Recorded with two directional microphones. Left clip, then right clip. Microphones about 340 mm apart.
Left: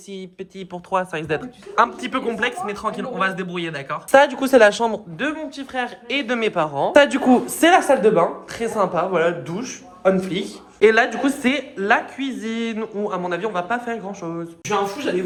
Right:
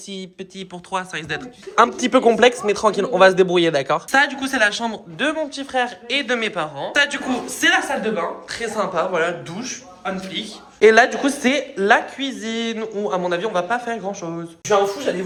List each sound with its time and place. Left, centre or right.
0.9 s speech: centre
4.1 s speech: centre
5.2 s speech: centre
10.0 s speech: centre
10.8 s speech: centre